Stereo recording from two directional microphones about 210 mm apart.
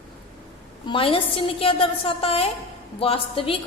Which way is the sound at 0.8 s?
25° left (ahead or behind).